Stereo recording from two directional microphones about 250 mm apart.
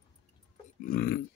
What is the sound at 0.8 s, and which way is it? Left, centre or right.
Speech, left.